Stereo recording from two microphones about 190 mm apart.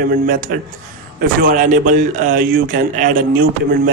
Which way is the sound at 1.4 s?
40° right (ahead or behind).